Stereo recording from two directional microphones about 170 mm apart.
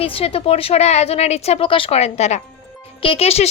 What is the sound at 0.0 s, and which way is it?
Speech, 35° left (ahead or behind).